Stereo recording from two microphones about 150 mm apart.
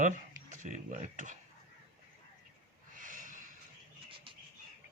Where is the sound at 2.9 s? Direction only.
60° right (ahead or behind).